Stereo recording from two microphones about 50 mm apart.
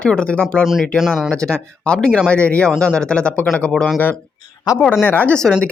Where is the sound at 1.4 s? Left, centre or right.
Centre.